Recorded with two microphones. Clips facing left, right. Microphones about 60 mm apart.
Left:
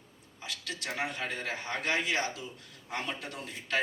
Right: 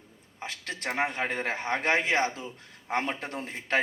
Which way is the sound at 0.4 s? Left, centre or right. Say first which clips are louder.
Right 4 dB; right.